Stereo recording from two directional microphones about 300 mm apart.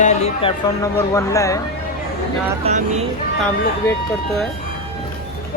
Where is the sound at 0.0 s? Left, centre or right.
Left.